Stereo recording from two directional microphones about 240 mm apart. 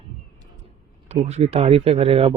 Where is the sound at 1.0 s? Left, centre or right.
Right.